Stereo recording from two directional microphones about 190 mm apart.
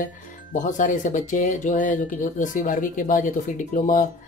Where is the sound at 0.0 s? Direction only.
45° left (ahead or behind).